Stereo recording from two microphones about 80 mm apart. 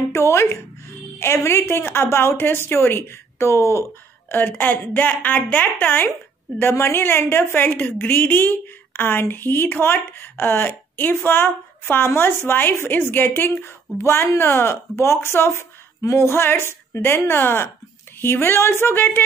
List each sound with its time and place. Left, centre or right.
0.1 s a woman's voice: left
4.3 s a woman's voice: left